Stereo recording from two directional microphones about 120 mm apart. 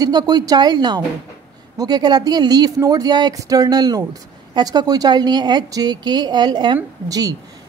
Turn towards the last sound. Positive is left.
turn(degrees=-30)  # may be behind; listen again after turning